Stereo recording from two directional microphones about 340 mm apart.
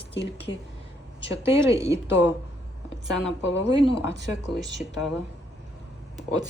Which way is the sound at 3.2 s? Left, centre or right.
Left.